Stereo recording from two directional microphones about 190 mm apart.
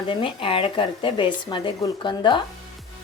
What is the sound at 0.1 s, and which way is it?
A woman's voice, 25° left (ahead or behind).